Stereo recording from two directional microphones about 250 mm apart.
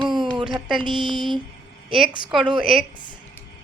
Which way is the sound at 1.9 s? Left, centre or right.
Centre.